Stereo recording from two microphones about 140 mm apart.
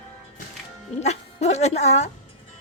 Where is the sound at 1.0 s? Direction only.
50° left (ahead or behind).